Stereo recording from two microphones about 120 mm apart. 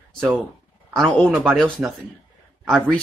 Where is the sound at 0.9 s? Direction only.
5° left (ahead or behind).